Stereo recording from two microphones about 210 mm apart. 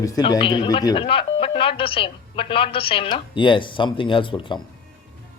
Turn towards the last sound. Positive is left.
turn(degrees=25)  # may be behind; listen again after turning